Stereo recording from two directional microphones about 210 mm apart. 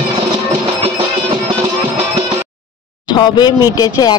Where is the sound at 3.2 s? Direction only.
20° left (ahead or behind).